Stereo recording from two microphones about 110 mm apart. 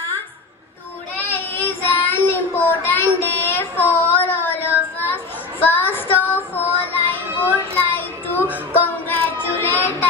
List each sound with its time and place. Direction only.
1.3 s child singing: 15° left (ahead or behind)